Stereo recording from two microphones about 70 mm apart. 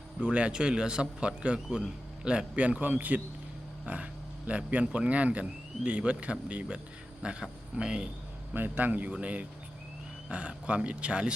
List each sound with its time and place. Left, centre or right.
0.2 s a man's voice: centre
8.5 s a man's voice: right